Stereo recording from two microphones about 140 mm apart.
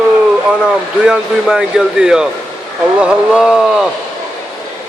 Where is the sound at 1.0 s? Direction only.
5° right (ahead or behind).